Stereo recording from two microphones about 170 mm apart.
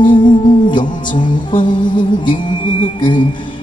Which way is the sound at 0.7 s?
25° left (ahead or behind).